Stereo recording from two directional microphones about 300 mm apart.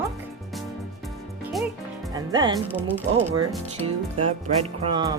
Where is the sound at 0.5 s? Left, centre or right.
Centre.